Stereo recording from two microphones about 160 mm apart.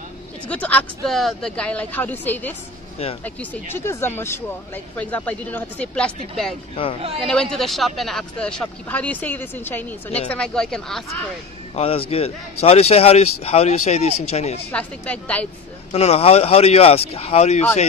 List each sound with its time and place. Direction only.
0.5 s speech: 10° left (ahead or behind)
6.7 s speech: 35° left (ahead or behind)
7.2 s speech: 5° left (ahead or behind)
11.7 s a man's voice: 35° left (ahead or behind)
14.7 s speech: 10° left (ahead or behind)
15.9 s speech: 40° left (ahead or behind)